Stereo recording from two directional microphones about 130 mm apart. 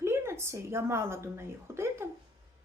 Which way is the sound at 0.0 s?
20° right (ahead or behind).